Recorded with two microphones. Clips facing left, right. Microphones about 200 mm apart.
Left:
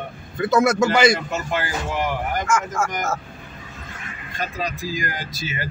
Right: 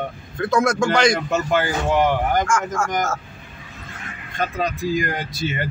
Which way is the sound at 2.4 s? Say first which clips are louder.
Even; 5° left (ahead or behind).